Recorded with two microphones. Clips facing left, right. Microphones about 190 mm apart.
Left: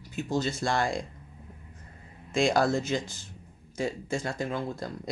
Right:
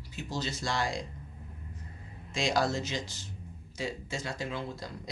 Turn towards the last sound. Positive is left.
turn(degrees=50)  # may be behind; listen again after turning